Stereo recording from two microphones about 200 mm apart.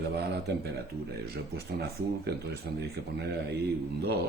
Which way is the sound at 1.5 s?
55° right (ahead or behind).